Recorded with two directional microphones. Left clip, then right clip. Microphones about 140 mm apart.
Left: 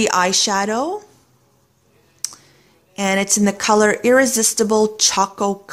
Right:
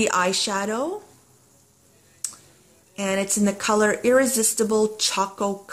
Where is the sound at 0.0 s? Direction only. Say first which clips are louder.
Left 5 dB; 30° left (ahead or behind).